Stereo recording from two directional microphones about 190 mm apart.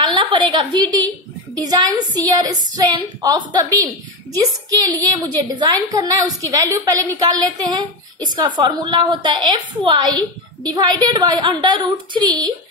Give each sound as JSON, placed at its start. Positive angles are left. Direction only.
{"t": 0.0, "sound": "a woman's voice", "side_deg": -25}